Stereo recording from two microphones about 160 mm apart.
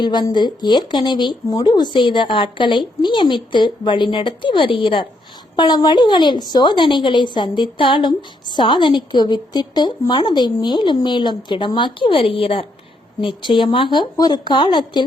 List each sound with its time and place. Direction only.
0.0 s a woman's voice: 25° left (ahead or behind)